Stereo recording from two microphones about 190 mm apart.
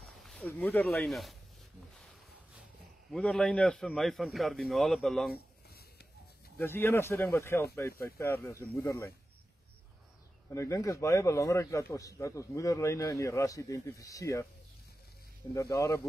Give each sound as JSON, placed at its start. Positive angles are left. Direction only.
{"t": 0.0, "sound": "speech", "side_deg": 0}
{"t": 3.1, "sound": "a man's voice", "side_deg": 5}
{"t": 6.6, "sound": "a man's voice", "side_deg": 10}
{"t": 10.5, "sound": "a man's voice", "side_deg": 15}
{"t": 15.5, "sound": "a man's voice", "side_deg": 20}